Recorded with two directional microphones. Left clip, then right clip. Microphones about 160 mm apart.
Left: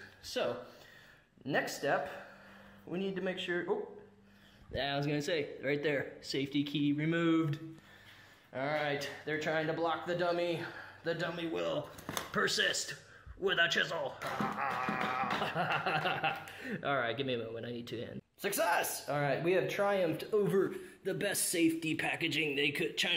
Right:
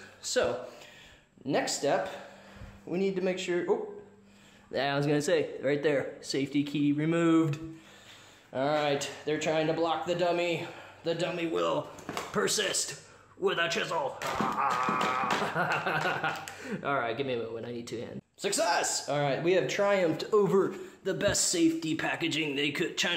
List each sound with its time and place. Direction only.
0.2 s speech: 25° right (ahead or behind)
1.5 s speech: 10° right (ahead or behind)
4.7 s speech: 35° right (ahead or behind)
8.5 s speech: 40° right (ahead or behind)
9.2 s speech: 15° right (ahead or behind); by 23.1 s 30° right (ahead or behind)